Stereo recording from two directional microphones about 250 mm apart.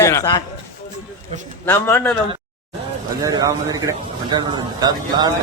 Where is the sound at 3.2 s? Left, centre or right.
Centre.